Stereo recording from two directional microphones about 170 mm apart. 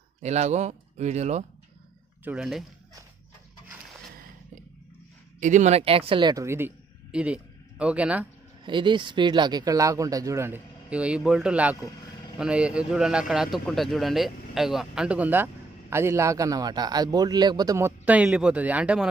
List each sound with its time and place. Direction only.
0.2 s speech: 40° right (ahead or behind)
2.2 s speech: 5° right (ahead or behind)
5.4 s speech: 45° right (ahead or behind); by 8.3 s 10° right (ahead or behind)
8.6 s a man's voice: 30° right (ahead or behind); by 19.0 s 5° right (ahead or behind)